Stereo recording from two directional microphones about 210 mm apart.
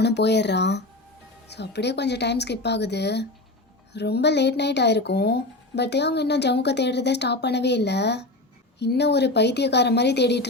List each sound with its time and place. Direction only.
0.0 s speech: 55° left (ahead or behind)